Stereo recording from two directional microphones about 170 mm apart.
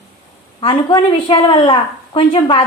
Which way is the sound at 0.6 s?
30° left (ahead or behind).